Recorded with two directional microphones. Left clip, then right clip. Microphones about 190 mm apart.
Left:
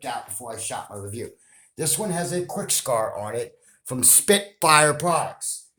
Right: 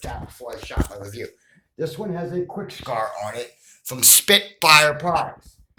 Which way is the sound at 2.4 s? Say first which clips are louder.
Left 4 dB; 65° left (ahead or behind).